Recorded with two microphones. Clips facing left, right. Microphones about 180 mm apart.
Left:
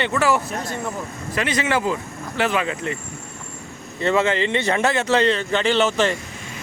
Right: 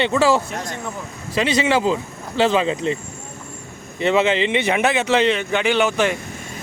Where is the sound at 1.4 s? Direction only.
20° right (ahead or behind).